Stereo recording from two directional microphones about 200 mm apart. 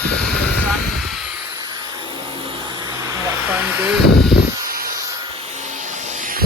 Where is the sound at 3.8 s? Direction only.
5° right (ahead or behind).